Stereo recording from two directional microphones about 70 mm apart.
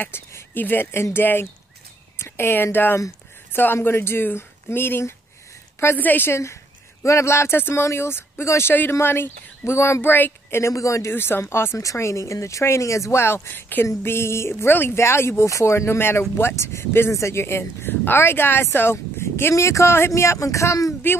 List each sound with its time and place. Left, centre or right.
0.1 s speech: left
6.3 s speech: left
10.1 s a woman's voice: left
10.7 s speech: left
11.1 s speech: left
11.8 s speech: left